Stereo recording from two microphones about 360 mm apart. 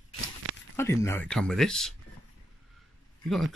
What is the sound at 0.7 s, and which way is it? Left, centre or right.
Speech, centre.